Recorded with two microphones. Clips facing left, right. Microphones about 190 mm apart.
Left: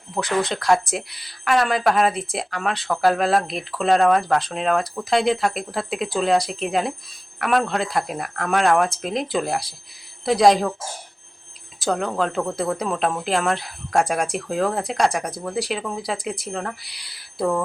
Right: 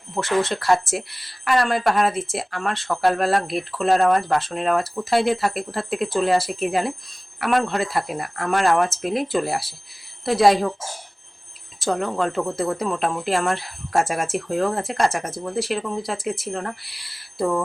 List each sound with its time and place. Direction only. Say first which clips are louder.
0.2 s speech: right 1 dB; centre (ahead or behind)
11.8 s speech: even; centre (ahead or behind)